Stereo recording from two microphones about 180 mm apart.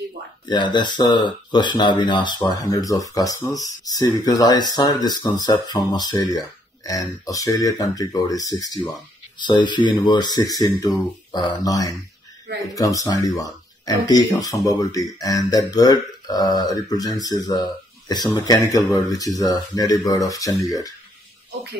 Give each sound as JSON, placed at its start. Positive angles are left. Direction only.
{"t": 0.5, "sound": "speech", "side_deg": 25}